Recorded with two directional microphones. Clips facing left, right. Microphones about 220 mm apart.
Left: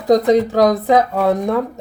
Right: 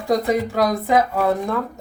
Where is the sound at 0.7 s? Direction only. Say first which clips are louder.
Left 4 dB; 20° left (ahead or behind).